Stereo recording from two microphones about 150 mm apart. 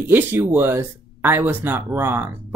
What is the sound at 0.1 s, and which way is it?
Speech, 15° right (ahead or behind).